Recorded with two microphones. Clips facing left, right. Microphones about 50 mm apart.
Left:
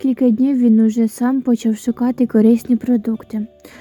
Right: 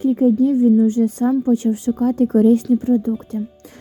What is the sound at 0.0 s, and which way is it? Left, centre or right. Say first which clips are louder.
A woman's voice: left 1 dB; left.